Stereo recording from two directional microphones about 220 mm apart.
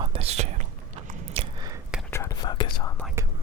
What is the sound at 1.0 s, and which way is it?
Biting, 25° right (ahead or behind).